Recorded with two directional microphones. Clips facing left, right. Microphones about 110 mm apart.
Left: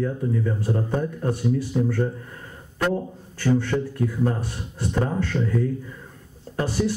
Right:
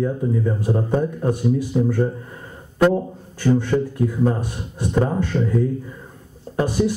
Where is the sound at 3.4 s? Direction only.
15° right (ahead or behind).